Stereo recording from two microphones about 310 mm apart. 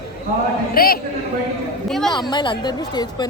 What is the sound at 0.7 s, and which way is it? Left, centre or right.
Speech, left.